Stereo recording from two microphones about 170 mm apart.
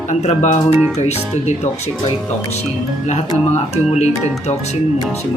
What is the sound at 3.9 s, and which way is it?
Speech, 40° left (ahead or behind).